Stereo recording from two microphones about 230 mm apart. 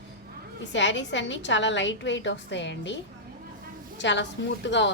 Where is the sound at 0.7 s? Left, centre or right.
Left.